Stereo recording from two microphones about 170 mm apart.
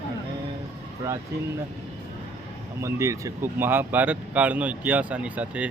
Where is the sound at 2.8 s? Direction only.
15° right (ahead or behind).